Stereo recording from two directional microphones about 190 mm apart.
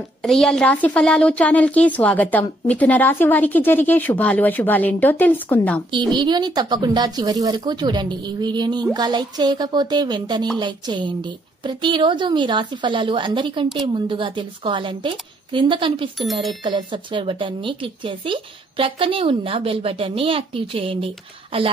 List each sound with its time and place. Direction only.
0.2 s a woman's voice: centre (ahead or behind)
5.9 s speech: 25° right (ahead or behind)